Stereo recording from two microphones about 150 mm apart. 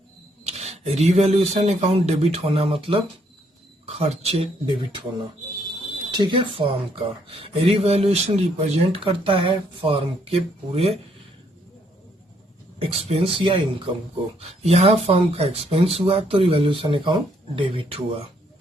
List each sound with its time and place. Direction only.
0.4 s speech: 45° right (ahead or behind)
6.1 s speech: 30° right (ahead or behind)
12.8 s speech: 40° right (ahead or behind)